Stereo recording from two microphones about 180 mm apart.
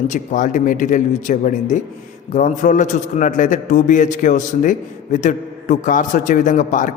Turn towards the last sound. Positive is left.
turn(degrees=45)  # may be behind; listen again after turning